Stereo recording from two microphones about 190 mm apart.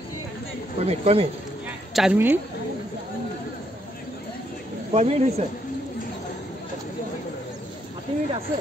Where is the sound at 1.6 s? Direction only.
5° right (ahead or behind).